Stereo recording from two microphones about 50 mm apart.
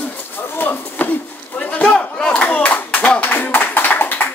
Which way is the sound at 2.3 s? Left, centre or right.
Left.